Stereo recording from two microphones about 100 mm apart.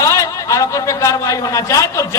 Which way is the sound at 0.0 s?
30° left (ahead or behind).